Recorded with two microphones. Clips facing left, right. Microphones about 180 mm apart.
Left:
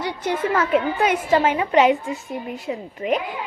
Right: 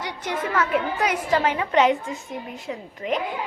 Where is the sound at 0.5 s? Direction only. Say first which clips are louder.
Left 2 dB; 25° left (ahead or behind).